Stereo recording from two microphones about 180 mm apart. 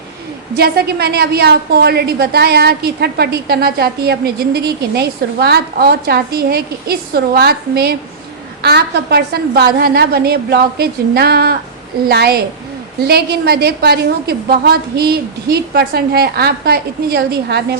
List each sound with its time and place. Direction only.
0.5 s a woman's voice: 60° right (ahead or behind)